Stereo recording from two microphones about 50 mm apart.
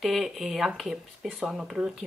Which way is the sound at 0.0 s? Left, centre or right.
Centre.